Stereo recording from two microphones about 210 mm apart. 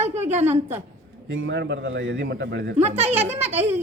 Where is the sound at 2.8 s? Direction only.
30° right (ahead or behind).